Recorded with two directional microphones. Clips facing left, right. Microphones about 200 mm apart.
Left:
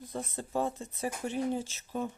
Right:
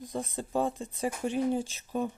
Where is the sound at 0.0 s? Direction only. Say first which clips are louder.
Right 3 dB; 15° right (ahead or behind).